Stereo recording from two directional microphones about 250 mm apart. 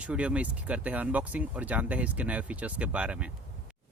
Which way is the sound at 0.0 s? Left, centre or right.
Centre.